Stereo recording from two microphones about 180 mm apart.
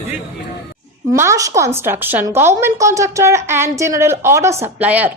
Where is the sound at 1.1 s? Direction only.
15° right (ahead or behind).